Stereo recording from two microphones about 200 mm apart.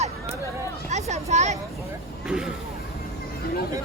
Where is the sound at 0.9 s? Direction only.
35° right (ahead or behind).